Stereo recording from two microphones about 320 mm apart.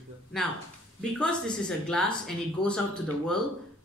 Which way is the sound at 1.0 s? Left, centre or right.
Centre.